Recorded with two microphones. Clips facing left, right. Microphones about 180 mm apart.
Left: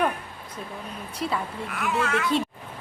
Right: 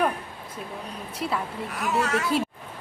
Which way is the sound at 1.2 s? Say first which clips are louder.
Even; 5° right (ahead or behind).